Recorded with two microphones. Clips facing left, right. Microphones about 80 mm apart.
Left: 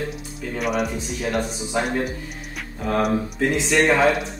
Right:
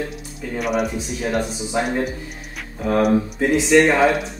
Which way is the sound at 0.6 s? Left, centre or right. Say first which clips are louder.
Right 2 dB; centre.